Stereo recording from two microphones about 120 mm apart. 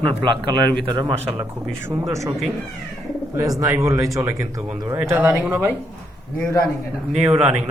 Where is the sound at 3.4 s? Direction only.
25° right (ahead or behind).